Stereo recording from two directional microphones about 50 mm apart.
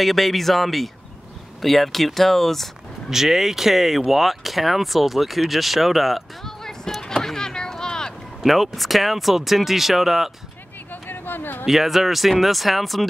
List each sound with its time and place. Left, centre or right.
0.0 s speech: centre
3.1 s speech: centre
8.5 s speech: centre
10.9 s a sound: left
11.6 s speech: centre